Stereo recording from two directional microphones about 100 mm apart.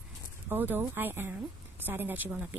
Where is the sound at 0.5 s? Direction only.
20° right (ahead or behind).